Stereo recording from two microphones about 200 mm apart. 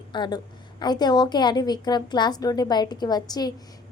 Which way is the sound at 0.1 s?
20° left (ahead or behind).